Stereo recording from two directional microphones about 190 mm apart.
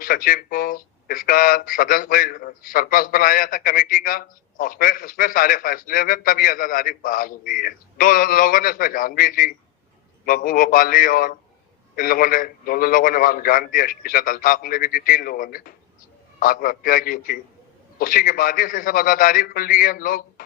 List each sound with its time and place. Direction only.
0.0 s speech: 50° left (ahead or behind)